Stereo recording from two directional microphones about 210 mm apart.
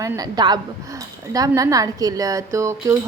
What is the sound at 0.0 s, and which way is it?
A woman's voice, 15° right (ahead or behind).